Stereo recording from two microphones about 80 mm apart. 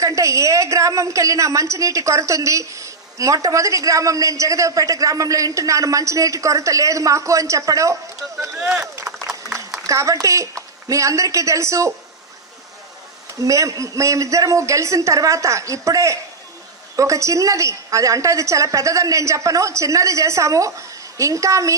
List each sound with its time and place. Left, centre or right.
0.0 s a woman's voice: right
8.5 s speech: centre
9.3 s a sound: right
9.8 s a woman's voice: right
13.4 s a woman's voice: right